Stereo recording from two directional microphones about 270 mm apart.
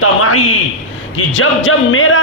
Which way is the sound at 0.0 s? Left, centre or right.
Left.